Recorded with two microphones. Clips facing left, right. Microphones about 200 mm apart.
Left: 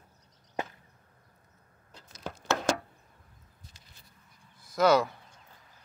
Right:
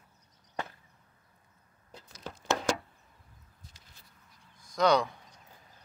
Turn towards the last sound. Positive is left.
turn(degrees=5)  # may be behind; listen again after turning